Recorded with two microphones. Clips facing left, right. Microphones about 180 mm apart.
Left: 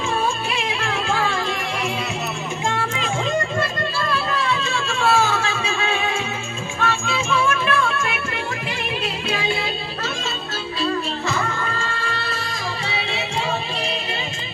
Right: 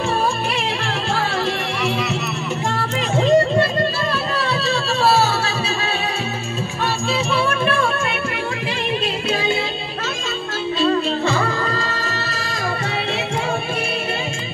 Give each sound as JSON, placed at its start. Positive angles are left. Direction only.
{"t": 4.4, "sound": "music", "side_deg": -35}
{"t": 6.8, "sound": "music", "side_deg": -35}
{"t": 11.2, "sound": "music", "side_deg": -35}